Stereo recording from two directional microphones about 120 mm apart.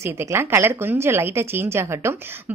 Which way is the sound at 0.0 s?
20° right (ahead or behind).